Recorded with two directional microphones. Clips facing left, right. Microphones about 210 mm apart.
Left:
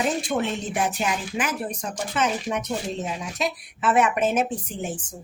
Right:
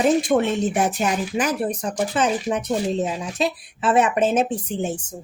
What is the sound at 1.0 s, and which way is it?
A woman's voice, 40° right (ahead or behind).